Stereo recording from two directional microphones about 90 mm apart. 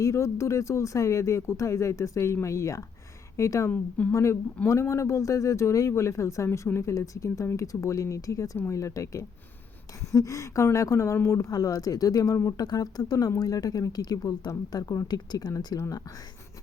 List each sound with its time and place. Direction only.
0.0 s speech: 35° left (ahead or behind)
3.7 s a woman's voice: 15° left (ahead or behind)
4.1 s speech: 30° left (ahead or behind)